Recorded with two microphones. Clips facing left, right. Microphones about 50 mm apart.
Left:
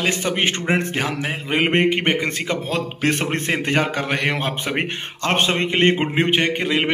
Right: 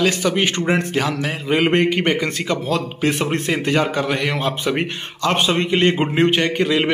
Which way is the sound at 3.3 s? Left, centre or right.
Left.